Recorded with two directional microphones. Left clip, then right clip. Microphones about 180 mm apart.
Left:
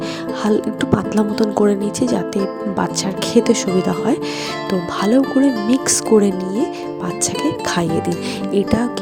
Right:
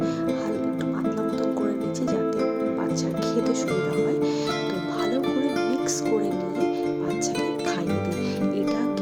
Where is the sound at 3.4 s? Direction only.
55° left (ahead or behind).